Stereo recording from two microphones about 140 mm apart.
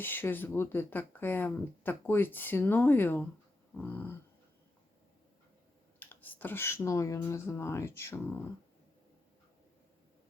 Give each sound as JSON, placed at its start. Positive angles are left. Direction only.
{"t": 0.0, "sound": "speech", "side_deg": 15}
{"t": 6.0, "sound": "speech", "side_deg": 15}